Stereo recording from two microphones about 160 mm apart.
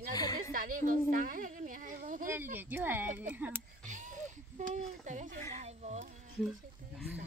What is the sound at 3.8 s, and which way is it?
Speech, 50° right (ahead or behind).